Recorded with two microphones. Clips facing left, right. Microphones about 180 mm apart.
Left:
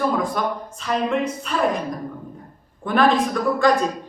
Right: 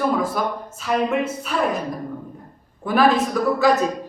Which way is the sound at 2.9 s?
5° right (ahead or behind).